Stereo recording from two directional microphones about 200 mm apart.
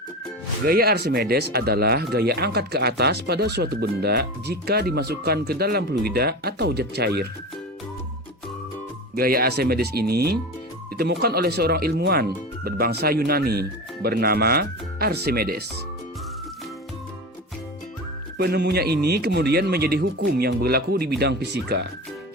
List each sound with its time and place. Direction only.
0.6 s speech: 50° right (ahead or behind)
9.1 s speech: 50° right (ahead or behind)
18.3 s speech: 55° right (ahead or behind)